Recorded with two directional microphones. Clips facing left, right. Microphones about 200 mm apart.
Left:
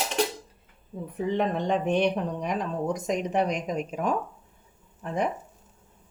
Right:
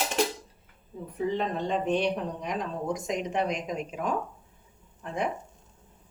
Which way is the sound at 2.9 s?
40° left (ahead or behind).